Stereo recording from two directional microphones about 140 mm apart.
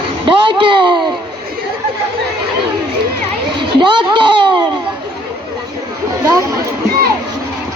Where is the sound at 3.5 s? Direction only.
35° right (ahead or behind).